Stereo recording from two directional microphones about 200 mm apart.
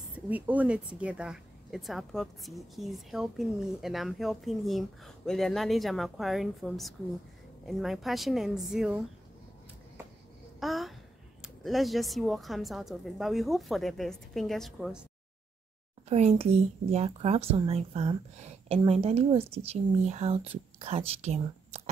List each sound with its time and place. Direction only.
0.1 s a woman's voice: 10° right (ahead or behind)
10.6 s a sound: centre (ahead or behind)
11.4 s a woman's voice: centre (ahead or behind)
16.1 s speech: 30° right (ahead or behind)